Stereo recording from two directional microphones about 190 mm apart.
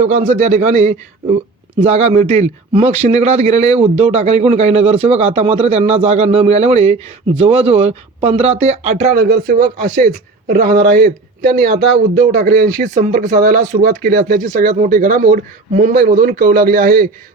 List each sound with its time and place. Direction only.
0.0 s a man's voice: 40° right (ahead or behind)